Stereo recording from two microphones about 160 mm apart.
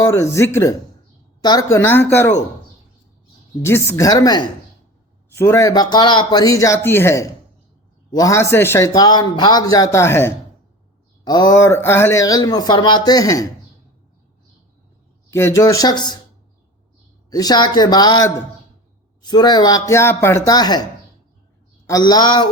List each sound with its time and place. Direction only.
0.0 s a woman's voice: 20° left (ahead or behind)
3.6 s speech: 15° left (ahead or behind)
15.3 s speech: 15° left (ahead or behind)
17.2 s speech: 25° left (ahead or behind)
19.2 s speech: 25° left (ahead or behind)